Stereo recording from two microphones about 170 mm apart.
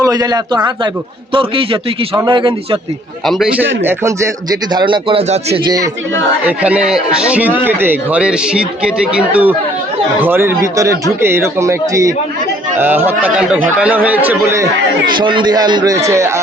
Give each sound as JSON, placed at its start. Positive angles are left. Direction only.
{"t": 0.0, "sound": "a man's voice", "side_deg": -20}
{"t": 3.2, "sound": "a man's voice", "side_deg": 0}
{"t": 3.8, "sound": "speech", "side_deg": -15}
{"t": 4.7, "sound": "speech", "side_deg": -25}
{"t": 5.6, "sound": "a man's voice", "side_deg": -20}
{"t": 6.6, "sound": "a man's voice", "side_deg": -5}